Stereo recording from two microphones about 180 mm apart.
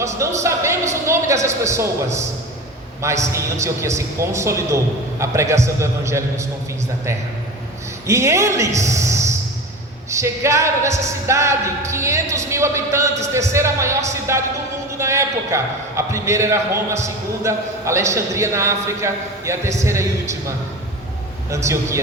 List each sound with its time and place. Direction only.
0.0 s a man's voice: 15° right (ahead or behind)
3.3 s a man's voice: 15° right (ahead or behind)
8.0 s a man's voice: 15° right (ahead or behind)
21.5 s a man's voice: 15° right (ahead or behind)